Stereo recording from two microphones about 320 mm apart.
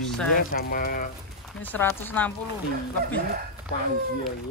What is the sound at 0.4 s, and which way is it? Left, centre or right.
Speech, left.